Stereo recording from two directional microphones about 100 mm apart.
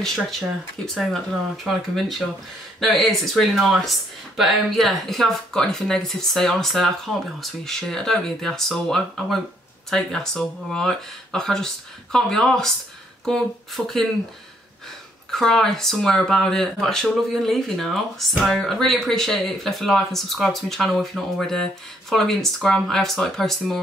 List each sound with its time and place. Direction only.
0.0 s speech: centre (ahead or behind)
15.3 s speech: 5° left (ahead or behind)